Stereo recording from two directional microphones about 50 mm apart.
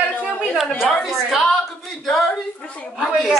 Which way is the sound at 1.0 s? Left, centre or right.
Centre.